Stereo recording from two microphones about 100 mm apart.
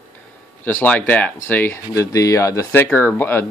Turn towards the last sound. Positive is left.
turn(degrees=20)  # may be behind; listen again after turning